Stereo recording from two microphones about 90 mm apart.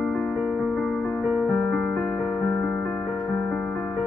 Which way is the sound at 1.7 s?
10° left (ahead or behind).